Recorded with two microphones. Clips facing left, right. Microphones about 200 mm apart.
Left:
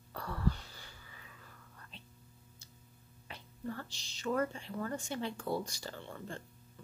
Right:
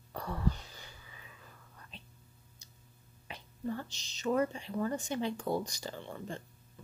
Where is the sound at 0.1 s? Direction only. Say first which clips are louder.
Right 1 dB; 15° right (ahead or behind).